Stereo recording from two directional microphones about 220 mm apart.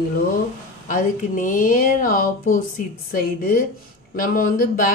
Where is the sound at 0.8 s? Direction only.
35° left (ahead or behind).